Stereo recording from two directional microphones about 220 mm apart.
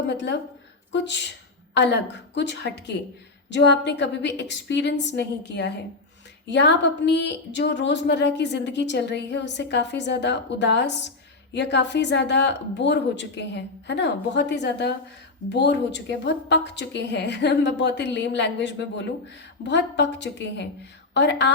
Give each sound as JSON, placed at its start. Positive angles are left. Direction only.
{"t": 0.1, "sound": "a woman's voice", "side_deg": 50}